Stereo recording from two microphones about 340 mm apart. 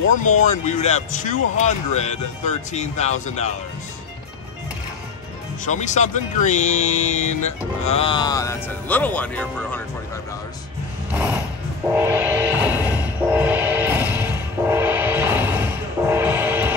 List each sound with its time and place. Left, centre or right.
0.1 s speech: left
5.7 s speech: left; by 9.8 s centre
11.9 s music: centre